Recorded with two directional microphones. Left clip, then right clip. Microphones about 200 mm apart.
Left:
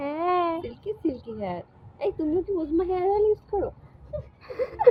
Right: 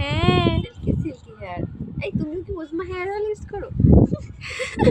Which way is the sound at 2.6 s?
30° left (ahead or behind).